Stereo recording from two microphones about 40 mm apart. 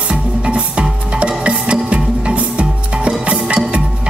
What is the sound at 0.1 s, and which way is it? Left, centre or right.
Music, right.